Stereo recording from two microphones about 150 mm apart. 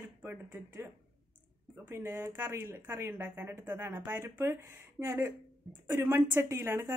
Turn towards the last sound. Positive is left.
turn(degrees=-15)  # may be behind; listen again after turning